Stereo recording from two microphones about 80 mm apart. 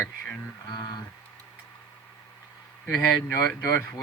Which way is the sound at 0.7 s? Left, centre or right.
Left.